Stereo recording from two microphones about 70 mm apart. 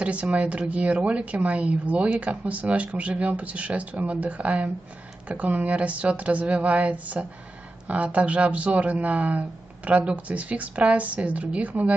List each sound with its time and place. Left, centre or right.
0.0 s a woman's voice: centre